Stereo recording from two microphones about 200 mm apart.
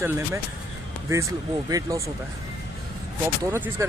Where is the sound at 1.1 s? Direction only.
15° right (ahead or behind).